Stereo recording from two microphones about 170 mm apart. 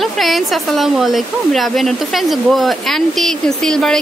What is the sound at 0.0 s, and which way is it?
Speech, centre (ahead or behind).